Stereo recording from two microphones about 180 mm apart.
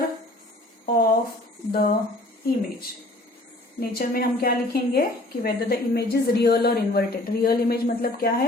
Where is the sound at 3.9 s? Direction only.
55° left (ahead or behind).